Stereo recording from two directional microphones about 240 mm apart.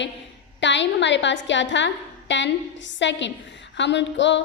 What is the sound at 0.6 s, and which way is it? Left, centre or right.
A woman's voice, left.